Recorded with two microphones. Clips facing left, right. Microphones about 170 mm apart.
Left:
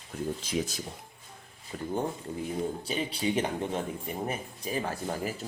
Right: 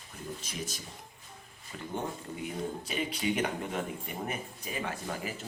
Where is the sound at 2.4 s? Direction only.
30° left (ahead or behind).